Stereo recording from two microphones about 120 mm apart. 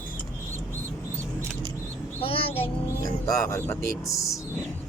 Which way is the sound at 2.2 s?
50° left (ahead or behind).